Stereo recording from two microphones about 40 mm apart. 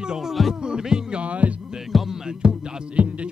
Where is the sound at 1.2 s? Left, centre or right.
Right.